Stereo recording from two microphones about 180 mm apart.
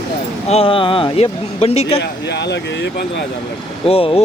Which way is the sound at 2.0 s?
70° left (ahead or behind).